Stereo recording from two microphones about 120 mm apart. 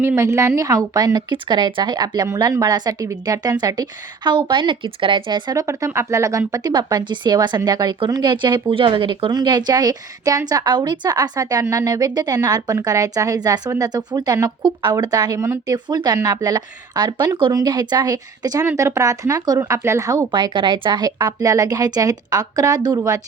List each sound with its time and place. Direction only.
0.0 s a woman's voice: 20° right (ahead or behind); by 2.2 s 40° right (ahead or behind)
2.2 s a woman's voice: 25° right (ahead or behind)
20.3 s a woman's voice: 40° right (ahead or behind)